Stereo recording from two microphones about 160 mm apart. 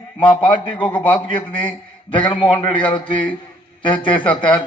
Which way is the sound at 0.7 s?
30° left (ahead or behind).